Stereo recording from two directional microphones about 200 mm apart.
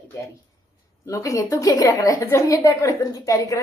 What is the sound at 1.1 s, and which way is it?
A woman's voice, 15° left (ahead or behind).